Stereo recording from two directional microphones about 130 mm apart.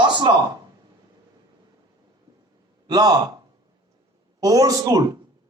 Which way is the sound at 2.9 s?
30° right (ahead or behind).